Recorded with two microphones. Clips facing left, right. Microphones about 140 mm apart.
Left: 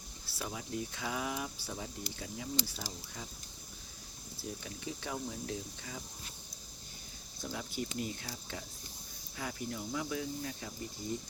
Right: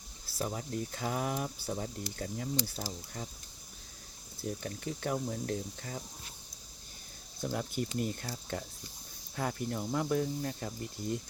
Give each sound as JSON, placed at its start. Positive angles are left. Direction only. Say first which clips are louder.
{"t": 0.3, "sound": "speech", "louder": "right 4 dB", "side_deg": -45}
{"t": 4.4, "sound": "speech", "louder": "right 6 dB", "side_deg": -50}
{"t": 7.5, "sound": "speech", "louder": "right 4 dB", "side_deg": -50}